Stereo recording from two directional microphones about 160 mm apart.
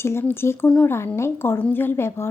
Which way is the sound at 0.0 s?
15° left (ahead or behind).